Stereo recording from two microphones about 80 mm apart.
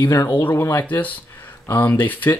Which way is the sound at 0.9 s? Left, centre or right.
Left.